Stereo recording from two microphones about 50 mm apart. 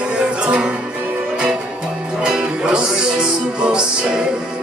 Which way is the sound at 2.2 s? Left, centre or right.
Centre.